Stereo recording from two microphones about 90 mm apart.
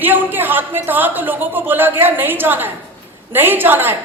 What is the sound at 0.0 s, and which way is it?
A woman's voice, 20° right (ahead or behind).